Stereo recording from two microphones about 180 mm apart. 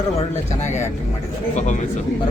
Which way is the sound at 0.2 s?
40° left (ahead or behind).